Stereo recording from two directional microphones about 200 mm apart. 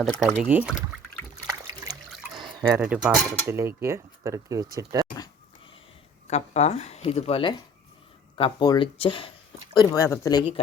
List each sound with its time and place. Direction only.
0.0 s speech: centre (ahead or behind)
1.5 s water: 20° right (ahead or behind)
2.8 s speech: 5° right (ahead or behind)
3.4 s speech: 15° right (ahead or behind)
6.2 s speech: 35° left (ahead or behind); by 10.5 s 20° left (ahead or behind)